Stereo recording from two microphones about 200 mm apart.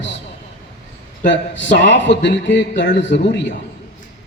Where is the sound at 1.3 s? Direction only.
65° left (ahead or behind).